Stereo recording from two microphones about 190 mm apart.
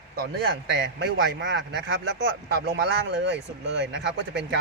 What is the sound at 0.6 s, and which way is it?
A man's voice, 70° right (ahead or behind).